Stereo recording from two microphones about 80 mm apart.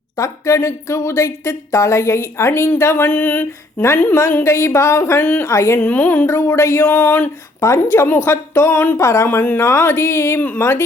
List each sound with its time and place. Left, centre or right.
0.2 s speech: left
5.8 s a sound: left
7.6 s speech: left
9.0 s speech: left